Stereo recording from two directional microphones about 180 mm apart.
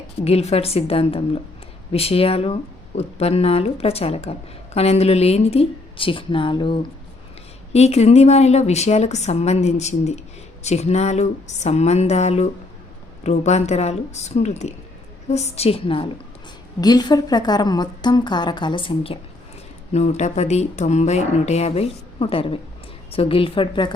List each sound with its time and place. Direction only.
0.2 s a woman's voice: 35° left (ahead or behind)